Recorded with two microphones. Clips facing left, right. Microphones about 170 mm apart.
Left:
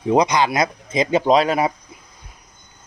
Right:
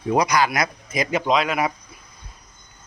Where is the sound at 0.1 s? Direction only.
25° left (ahead or behind).